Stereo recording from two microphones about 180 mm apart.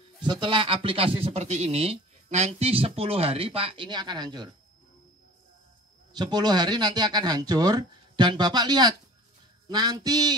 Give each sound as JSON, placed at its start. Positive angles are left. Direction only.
{"t": 0.2, "sound": "speech", "side_deg": -25}
{"t": 6.1, "sound": "speech", "side_deg": -25}